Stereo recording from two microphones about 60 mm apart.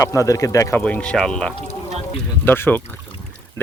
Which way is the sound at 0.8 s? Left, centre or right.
Left.